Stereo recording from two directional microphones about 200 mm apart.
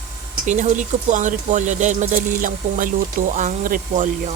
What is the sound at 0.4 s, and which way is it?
Speech, 35° right (ahead or behind).